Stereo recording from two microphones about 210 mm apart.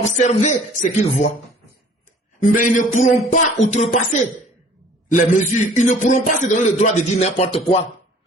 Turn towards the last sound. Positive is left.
turn(degrees=30)  # may be behind; listen again after turning